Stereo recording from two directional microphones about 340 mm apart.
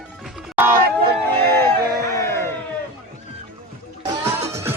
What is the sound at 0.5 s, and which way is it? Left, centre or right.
Speech, centre.